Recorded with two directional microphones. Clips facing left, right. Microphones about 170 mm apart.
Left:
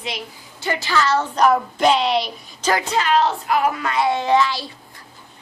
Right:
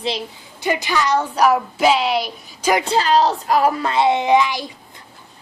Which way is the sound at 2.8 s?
30° right (ahead or behind).